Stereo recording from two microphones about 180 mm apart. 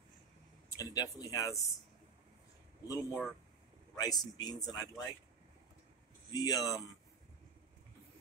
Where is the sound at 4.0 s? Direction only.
20° left (ahead or behind).